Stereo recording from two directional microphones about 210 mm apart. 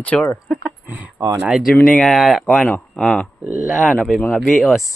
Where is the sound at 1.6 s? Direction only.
45° left (ahead or behind).